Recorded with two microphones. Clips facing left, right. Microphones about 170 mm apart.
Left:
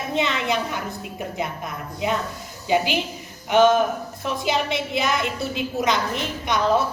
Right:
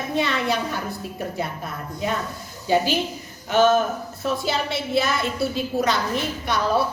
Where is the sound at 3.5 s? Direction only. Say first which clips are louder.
Left 1 dB; 20° left (ahead or behind).